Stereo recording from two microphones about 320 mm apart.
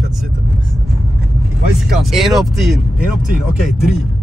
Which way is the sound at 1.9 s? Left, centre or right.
Centre.